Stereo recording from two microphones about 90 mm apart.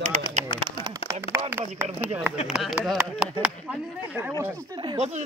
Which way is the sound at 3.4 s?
15° right (ahead or behind).